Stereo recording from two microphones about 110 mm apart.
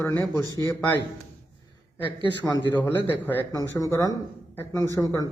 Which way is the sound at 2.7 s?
20° left (ahead or behind).